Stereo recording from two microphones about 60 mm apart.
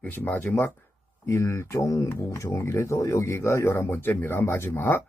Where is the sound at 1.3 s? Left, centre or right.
Left.